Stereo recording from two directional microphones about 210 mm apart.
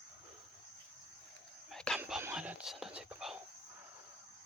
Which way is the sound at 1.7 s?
Centre (ahead or behind).